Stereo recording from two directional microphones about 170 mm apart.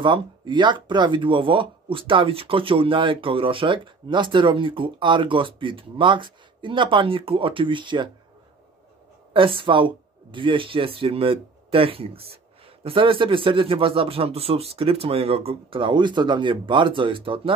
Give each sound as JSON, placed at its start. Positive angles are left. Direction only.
{"t": 0.0, "sound": "speech", "side_deg": -30}
{"t": 9.3, "sound": "speech", "side_deg": -30}